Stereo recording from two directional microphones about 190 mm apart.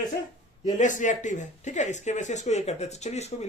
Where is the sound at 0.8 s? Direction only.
40° left (ahead or behind).